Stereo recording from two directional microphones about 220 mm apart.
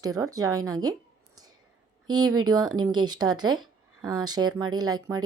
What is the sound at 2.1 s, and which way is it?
Speech, 20° right (ahead or behind).